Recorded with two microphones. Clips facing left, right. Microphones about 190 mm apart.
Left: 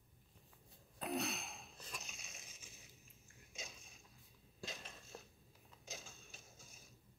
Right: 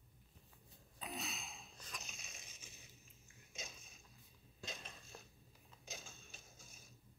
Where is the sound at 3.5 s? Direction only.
Centre (ahead or behind).